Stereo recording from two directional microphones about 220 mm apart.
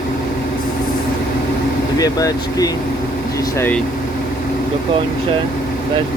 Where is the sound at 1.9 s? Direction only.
15° left (ahead or behind).